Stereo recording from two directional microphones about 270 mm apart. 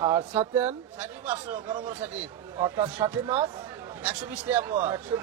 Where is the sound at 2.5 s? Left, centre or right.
Centre.